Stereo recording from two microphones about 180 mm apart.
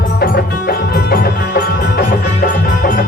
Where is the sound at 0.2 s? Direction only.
60° left (ahead or behind).